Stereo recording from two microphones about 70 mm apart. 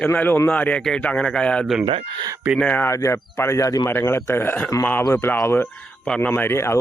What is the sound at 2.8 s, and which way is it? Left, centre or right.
Speech, left.